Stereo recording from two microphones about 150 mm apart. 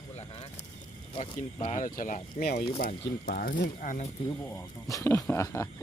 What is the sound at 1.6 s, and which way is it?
Speech, 55° left (ahead or behind).